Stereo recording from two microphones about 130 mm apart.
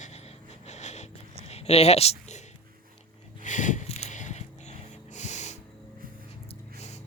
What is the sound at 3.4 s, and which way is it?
Wheeze, 75° left (ahead or behind).